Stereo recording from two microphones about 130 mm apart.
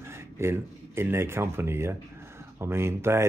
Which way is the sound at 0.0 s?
20° right (ahead or behind).